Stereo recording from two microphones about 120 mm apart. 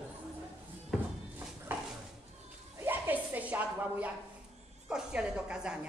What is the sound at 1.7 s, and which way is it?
Dog, 15° right (ahead or behind).